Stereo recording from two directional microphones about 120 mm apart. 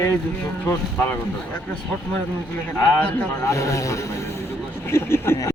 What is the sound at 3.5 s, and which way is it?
Speech, 25° left (ahead or behind).